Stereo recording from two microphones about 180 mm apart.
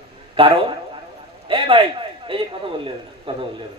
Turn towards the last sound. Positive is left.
turn(degrees=-30)  # may be behind; listen again after turning